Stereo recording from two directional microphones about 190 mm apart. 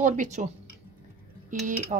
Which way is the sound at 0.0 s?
40° right (ahead or behind).